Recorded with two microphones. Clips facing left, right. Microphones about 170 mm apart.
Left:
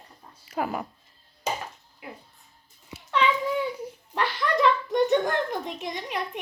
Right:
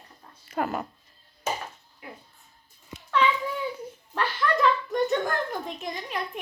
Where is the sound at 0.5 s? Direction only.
Centre (ahead or behind).